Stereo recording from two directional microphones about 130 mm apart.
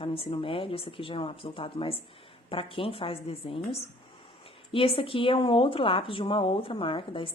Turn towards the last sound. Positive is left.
turn(degrees=40)  # may be behind; listen again after turning